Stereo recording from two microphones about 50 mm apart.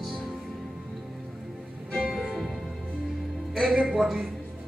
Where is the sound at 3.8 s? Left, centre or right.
Centre.